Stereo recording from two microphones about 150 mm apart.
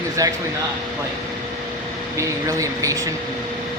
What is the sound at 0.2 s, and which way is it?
Speech, 20° right (ahead or behind).